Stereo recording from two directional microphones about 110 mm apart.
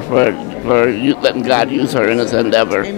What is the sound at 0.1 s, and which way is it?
Speech, 20° left (ahead or behind).